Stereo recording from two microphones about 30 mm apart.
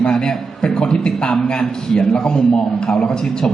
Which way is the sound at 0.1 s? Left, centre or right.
Left.